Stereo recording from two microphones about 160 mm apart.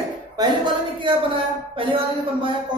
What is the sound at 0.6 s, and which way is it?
Speech, 30° right (ahead or behind).